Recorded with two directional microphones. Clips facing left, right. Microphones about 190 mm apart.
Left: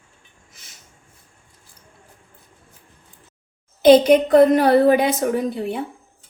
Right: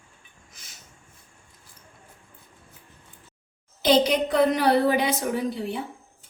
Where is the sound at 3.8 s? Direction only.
50° left (ahead or behind).